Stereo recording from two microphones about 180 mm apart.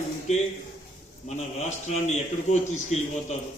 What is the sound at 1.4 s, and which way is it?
A man's voice, 40° left (ahead or behind).